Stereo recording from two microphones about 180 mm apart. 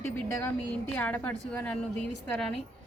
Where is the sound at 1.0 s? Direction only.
10° left (ahead or behind).